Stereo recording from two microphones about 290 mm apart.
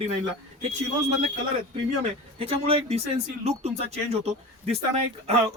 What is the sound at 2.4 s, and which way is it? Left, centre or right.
Speech, centre.